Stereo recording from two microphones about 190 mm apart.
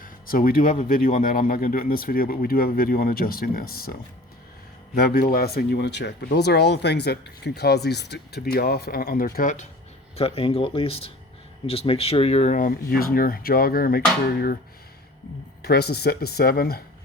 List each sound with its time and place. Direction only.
0.0 s speech: 50° left (ahead or behind)
4.9 s speech: 55° left (ahead or behind)
10.2 s speech: 30° left (ahead or behind); by 14.6 s 55° left (ahead or behind)
15.6 s speech: 55° left (ahead or behind)